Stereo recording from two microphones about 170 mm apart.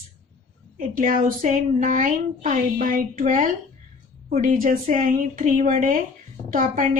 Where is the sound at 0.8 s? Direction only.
50° right (ahead or behind).